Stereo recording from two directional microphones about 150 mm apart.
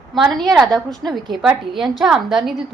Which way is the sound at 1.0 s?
Centre (ahead or behind).